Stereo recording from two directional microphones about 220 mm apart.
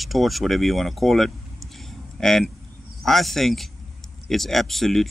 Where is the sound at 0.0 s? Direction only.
Centre (ahead or behind).